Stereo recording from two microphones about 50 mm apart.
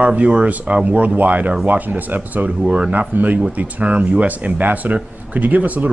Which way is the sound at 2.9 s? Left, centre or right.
Right.